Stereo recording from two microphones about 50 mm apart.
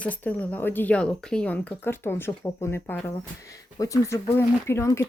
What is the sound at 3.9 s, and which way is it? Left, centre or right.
Speech, left.